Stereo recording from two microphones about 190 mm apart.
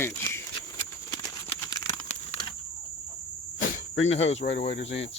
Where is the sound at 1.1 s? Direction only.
15° left (ahead or behind).